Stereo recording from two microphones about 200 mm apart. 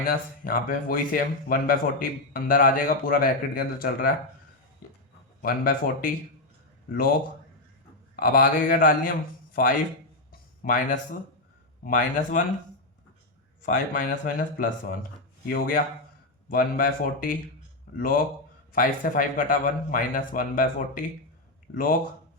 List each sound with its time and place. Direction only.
0.0 s speech: 45° left (ahead or behind)
5.4 s speech: 45° left (ahead or behind)
8.1 s speech: 45° left (ahead or behind)
10.6 s speech: 40° left (ahead or behind)
13.6 s speech: 40° left (ahead or behind)
21.7 s a man's voice: 55° left (ahead or behind)